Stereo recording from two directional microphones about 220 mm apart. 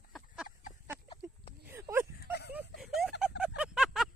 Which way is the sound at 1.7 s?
10° right (ahead or behind).